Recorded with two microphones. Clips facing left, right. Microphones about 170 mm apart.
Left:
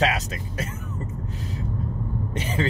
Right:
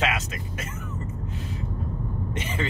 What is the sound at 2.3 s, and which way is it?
Speech, 35° left (ahead or behind).